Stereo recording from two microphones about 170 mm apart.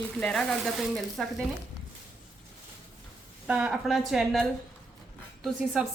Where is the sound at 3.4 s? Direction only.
5° right (ahead or behind).